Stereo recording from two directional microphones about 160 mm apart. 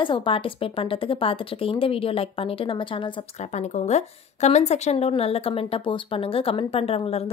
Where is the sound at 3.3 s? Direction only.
45° left (ahead or behind).